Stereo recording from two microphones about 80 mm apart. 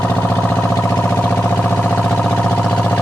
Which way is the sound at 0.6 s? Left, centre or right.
Left.